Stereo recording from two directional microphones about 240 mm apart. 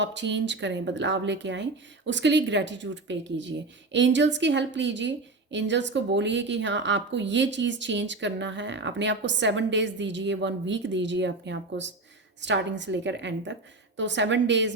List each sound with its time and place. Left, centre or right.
0.0 s a woman's voice: right